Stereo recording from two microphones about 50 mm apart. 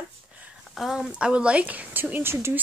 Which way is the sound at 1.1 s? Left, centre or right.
Right.